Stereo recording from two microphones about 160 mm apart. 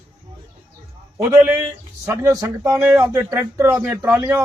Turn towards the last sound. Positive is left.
turn(degrees=-10)  # may be behind; listen again after turning